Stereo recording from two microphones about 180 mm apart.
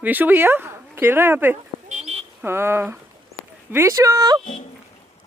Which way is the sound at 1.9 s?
40° right (ahead or behind).